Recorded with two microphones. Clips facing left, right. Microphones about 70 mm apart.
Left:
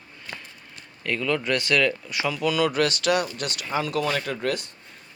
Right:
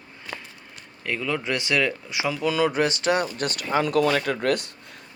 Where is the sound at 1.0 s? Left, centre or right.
Centre; by 4.6 s right.